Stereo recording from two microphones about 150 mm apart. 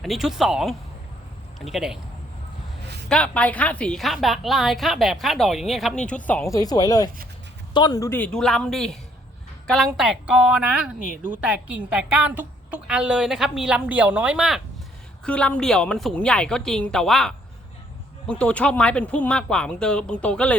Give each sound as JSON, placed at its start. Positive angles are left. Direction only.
{"t": 0.0, "sound": "a woman's voice", "side_deg": 0}
{"t": 3.1, "sound": "a woman's voice", "side_deg": 10}
{"t": 15.2, "sound": "a woman's voice", "side_deg": 5}